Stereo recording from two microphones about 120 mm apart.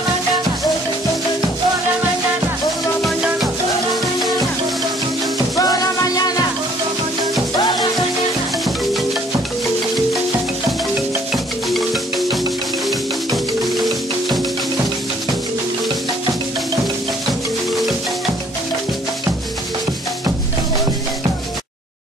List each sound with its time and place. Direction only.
5.6 s music: 30° left (ahead or behind)
11.3 s marimba: centre (ahead or behind)